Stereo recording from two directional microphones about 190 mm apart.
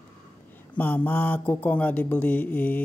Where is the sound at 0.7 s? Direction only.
10° left (ahead or behind).